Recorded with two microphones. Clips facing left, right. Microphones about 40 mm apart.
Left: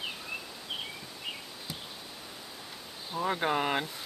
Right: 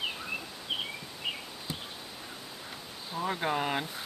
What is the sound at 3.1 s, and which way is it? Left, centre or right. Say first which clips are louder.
Speech: left 2 dB; centre.